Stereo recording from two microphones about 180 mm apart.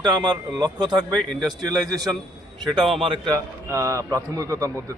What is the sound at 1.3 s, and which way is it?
Speech, centre (ahead or behind).